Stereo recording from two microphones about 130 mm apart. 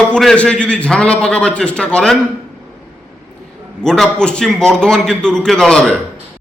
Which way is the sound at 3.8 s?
5° left (ahead or behind).